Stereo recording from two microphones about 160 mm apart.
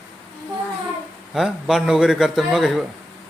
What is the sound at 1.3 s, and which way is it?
A man's voice, centre (ahead or behind).